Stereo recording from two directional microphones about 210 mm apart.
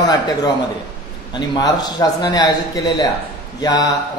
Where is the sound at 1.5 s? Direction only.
20° left (ahead or behind).